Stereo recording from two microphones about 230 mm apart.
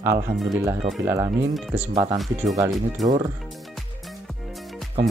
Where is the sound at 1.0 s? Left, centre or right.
Centre.